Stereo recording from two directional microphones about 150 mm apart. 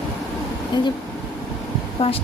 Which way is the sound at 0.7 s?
30° left (ahead or behind).